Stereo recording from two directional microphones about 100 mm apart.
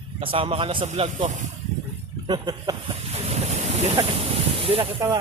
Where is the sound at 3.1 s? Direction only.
90° right.